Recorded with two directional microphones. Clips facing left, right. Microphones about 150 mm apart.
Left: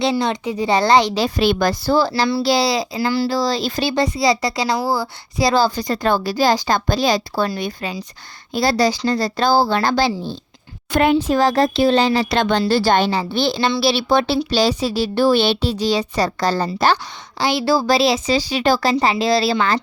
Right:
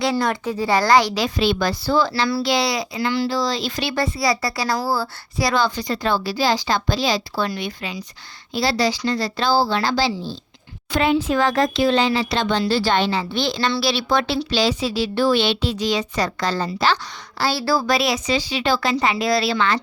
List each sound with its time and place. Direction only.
0.0 s a woman's voice: 25° left (ahead or behind)
1.4 s a woman's voice: 45° left (ahead or behind)
3.9 s a woman's voice: 20° left (ahead or behind)
5.5 s a woman's voice: 35° left (ahead or behind)
17.3 s a woman's voice: 15° left (ahead or behind)
17.7 s speech: 30° left (ahead or behind)